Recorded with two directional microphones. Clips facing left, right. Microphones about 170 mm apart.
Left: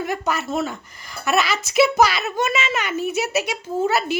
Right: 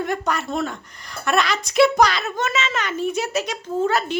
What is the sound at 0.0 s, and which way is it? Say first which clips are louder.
Speech: even; 5° left (ahead or behind).